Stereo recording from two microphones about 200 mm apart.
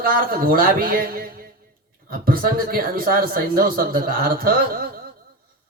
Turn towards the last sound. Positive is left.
turn(degrees=-45)  # may be behind; listen again after turning